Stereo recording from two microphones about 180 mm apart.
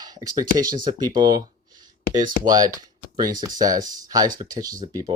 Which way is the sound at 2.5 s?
20° right (ahead or behind).